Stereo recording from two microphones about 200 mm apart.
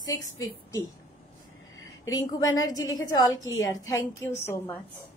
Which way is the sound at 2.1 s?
20° left (ahead or behind).